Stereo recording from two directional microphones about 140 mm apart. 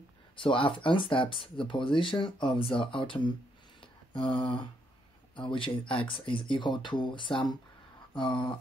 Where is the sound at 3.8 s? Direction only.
35° left (ahead or behind).